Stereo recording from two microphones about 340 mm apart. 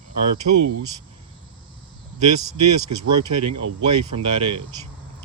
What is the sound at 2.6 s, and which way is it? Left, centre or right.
Speech, right.